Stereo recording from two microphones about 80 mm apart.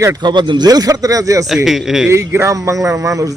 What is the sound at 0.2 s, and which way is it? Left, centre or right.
Speech, right.